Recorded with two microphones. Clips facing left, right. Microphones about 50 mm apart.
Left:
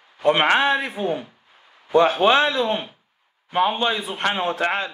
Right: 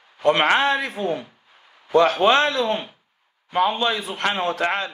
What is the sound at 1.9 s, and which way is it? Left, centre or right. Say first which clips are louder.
Speech: even; right.